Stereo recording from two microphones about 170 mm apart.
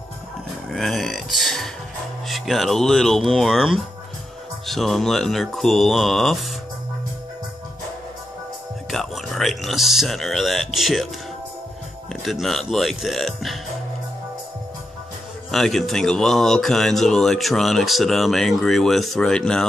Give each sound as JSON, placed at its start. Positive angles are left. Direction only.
{"t": 0.7, "sound": "speech", "side_deg": 0}
{"t": 8.9, "sound": "speech", "side_deg": 0}
{"t": 12.1, "sound": "speech", "side_deg": 0}
{"t": 15.5, "sound": "speech", "side_deg": 0}